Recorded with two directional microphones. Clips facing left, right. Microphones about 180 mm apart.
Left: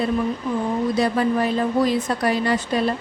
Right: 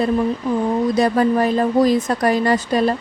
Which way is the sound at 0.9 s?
45° right (ahead or behind).